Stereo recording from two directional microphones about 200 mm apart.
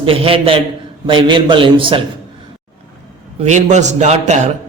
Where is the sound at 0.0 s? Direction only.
30° right (ahead or behind).